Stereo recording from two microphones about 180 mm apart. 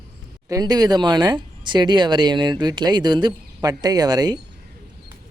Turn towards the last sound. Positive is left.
turn(degrees=-20)  # may be behind; listen again after turning